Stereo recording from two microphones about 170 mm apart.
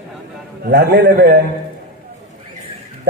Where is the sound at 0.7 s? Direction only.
80° right.